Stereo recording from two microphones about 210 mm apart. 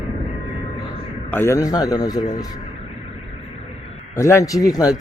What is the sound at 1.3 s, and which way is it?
Speech, 10° left (ahead or behind).